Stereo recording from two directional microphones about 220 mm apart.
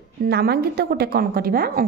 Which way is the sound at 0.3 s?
45° right (ahead or behind).